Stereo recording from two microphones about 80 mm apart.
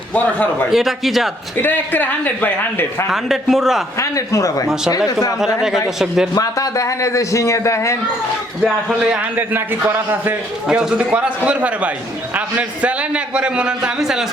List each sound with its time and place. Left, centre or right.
0.7 s a man's voice: centre
1.6 s a man's voice: left
3.1 s a man's voice: centre
3.9 s speech: left
5.4 s a man's voice: centre
6.3 s a man's voice: left
8.6 s a man's voice: centre
9.3 s a man's voice: right
10.7 s a man's voice: centre